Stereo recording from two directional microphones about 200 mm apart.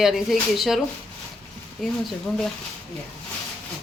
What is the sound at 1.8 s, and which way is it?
Speech, centre (ahead or behind).